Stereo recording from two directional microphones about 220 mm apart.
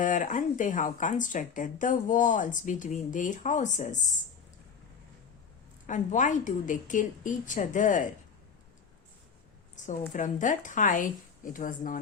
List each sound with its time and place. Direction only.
0.0 s speech: 35° left (ahead or behind)
5.8 s speech: 35° left (ahead or behind)
9.7 s a sound: 35° left (ahead or behind)
10.1 s speech: 35° left (ahead or behind)